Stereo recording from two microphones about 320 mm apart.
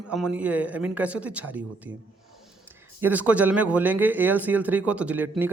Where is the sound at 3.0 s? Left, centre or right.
Centre.